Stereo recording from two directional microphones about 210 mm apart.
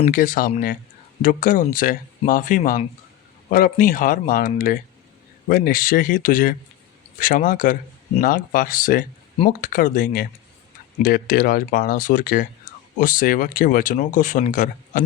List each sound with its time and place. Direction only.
0.0 s speech: 40° left (ahead or behind)